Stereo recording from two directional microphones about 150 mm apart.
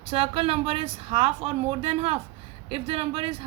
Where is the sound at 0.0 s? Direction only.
40° right (ahead or behind).